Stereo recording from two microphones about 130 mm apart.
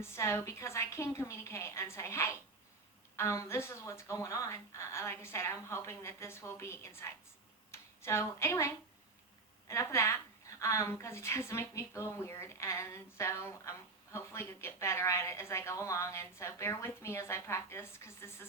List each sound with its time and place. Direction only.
0.0 s a woman's voice: 20° left (ahead or behind)